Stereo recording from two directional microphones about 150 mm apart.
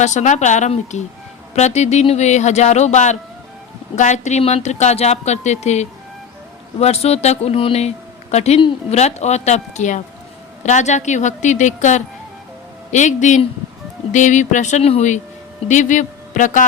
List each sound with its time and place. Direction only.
0.0 s a man's voice: 50° left (ahead or behind)